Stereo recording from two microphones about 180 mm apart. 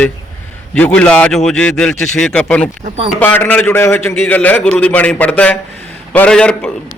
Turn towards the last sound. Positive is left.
turn(degrees=5)  # may be behind; listen again after turning